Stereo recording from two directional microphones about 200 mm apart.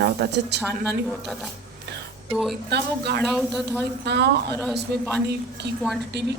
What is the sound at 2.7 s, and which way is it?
Speech, 55° right (ahead or behind).